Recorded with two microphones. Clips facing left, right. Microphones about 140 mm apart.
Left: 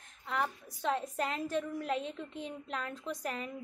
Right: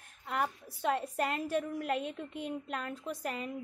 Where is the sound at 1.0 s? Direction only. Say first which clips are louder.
Right 2 dB; 10° right (ahead or behind).